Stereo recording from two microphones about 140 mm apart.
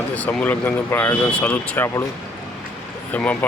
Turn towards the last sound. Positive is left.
turn(degrees=10)  # may be behind; listen again after turning